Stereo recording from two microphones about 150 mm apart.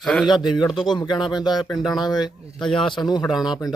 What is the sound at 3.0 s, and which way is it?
Speech, 25° left (ahead or behind).